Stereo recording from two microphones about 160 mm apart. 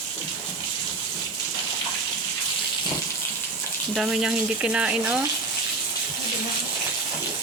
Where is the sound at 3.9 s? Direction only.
5° right (ahead or behind).